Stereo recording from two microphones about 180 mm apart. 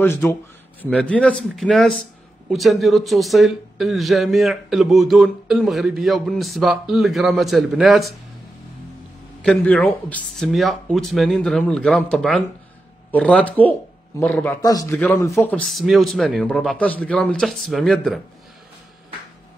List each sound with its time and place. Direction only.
0.0 s a man's voice: 15° left (ahead or behind)
9.4 s a man's voice: 5° left (ahead or behind)
14.6 s a man's voice: 20° left (ahead or behind)
15.4 s a man's voice: 5° left (ahead or behind)